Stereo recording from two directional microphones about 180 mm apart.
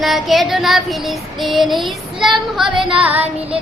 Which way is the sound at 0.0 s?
Centre (ahead or behind).